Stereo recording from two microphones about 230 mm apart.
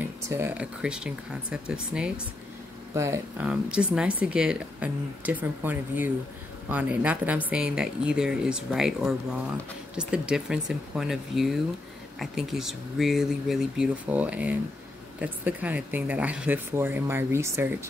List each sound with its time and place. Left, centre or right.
0.0 s a woman's voice: centre